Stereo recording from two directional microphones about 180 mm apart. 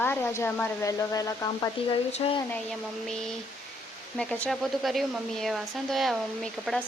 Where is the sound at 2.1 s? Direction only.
35° left (ahead or behind).